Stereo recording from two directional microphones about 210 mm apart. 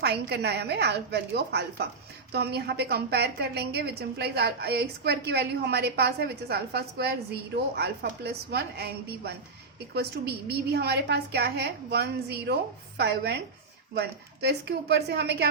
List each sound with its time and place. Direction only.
0.0 s a woman's voice: 50° right (ahead or behind)
10.7 s a woman's voice: 50° right (ahead or behind)